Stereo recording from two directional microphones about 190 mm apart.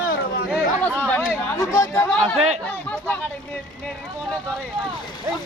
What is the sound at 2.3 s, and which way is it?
Speech, 35° right (ahead or behind).